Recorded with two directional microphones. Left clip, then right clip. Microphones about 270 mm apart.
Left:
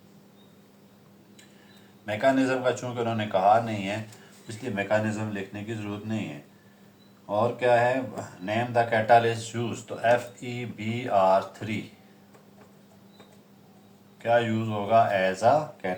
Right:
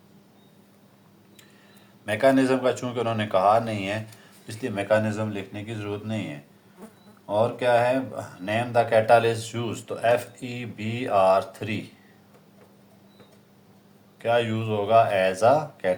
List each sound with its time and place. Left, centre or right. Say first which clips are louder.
2.0 s speech: right 3 dB; right
7.3 s speech: right 1 dB; right
14.2 s speech: even; right